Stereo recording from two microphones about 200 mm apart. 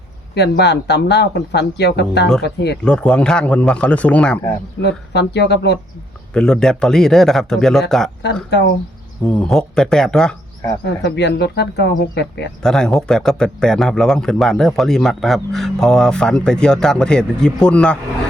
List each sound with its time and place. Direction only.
0.3 s speech: 55° left (ahead or behind)
2.8 s speech: 5° left (ahead or behind)
4.8 s speech: 60° left (ahead or behind)
6.3 s speech: 5° left (ahead or behind)
8.2 s speech: 55° left (ahead or behind)
9.2 s speech: 5° left (ahead or behind)
11.0 s speech: 60° left (ahead or behind)
12.6 s speech: centre (ahead or behind)